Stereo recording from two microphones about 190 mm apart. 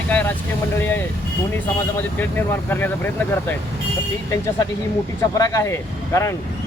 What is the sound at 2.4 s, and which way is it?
Speech, 10° left (ahead or behind).